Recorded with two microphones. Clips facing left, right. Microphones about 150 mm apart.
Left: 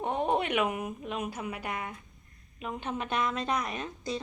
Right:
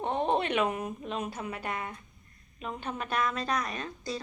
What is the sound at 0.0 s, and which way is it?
A woman's voice, 10° left (ahead or behind).